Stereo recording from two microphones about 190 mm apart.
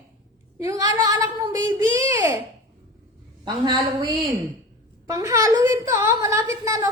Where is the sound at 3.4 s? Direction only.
20° right (ahead or behind).